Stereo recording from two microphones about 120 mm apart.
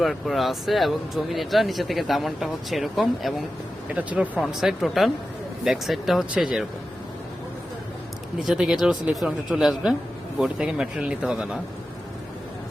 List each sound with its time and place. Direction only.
0.0 s speech: centre (ahead or behind)
3.9 s speech: 10° right (ahead or behind)
8.4 s speech: 5° right (ahead or behind)